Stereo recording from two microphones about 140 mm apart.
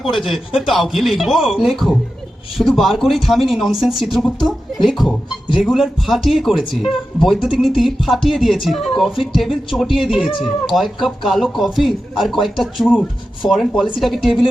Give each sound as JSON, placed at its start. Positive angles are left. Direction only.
{"t": 0.2, "sound": "speech", "side_deg": 0}